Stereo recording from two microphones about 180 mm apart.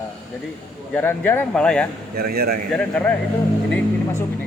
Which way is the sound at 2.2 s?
55° right (ahead or behind).